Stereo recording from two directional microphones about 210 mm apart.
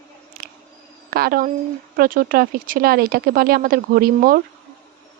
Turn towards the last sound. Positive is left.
turn(degrees=-40)  # may be behind; listen again after turning